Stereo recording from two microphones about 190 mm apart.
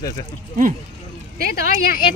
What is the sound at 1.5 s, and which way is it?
Speech, 50° left (ahead or behind).